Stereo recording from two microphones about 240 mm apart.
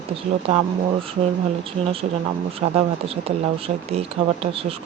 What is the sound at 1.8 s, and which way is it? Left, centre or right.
Speech, right.